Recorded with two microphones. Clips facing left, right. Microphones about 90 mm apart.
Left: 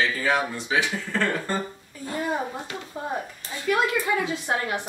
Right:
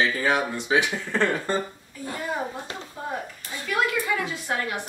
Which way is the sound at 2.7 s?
30° right (ahead or behind).